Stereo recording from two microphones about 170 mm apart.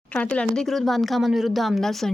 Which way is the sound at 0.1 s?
10° left (ahead or behind).